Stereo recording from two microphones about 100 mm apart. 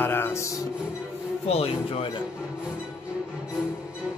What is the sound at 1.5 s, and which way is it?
Speech, 80° left.